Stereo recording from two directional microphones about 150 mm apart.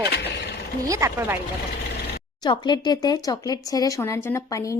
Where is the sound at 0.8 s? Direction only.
20° right (ahead or behind).